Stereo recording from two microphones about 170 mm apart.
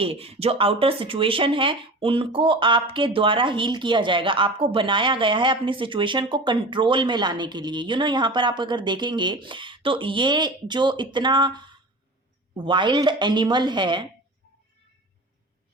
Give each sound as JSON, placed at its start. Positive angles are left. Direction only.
{"t": 0.0, "sound": "speech", "side_deg": -35}